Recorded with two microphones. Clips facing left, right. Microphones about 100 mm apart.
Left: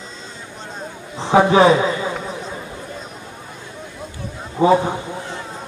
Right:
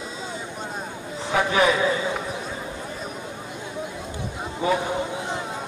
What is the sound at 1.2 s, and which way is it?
Speech, 30° left (ahead or behind).